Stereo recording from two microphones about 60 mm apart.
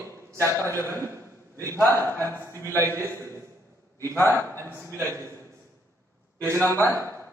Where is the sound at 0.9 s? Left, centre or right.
Right.